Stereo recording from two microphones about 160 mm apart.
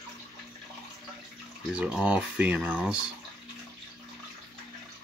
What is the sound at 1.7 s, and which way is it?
Speech, 5° right (ahead or behind).